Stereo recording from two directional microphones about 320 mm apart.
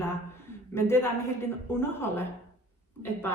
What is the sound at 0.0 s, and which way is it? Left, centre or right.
Speech, centre.